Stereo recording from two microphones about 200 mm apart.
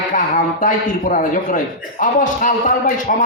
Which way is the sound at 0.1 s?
40° left (ahead or behind).